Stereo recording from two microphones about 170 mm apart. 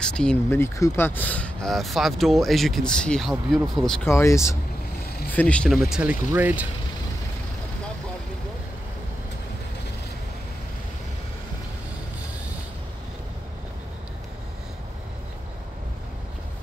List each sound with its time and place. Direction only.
0.0 s speech: 5° left (ahead or behind)
4.1 s speech: 15° left (ahead or behind); by 6.7 s 10° right (ahead or behind)